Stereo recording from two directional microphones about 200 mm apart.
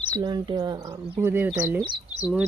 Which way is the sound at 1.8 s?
25° right (ahead or behind).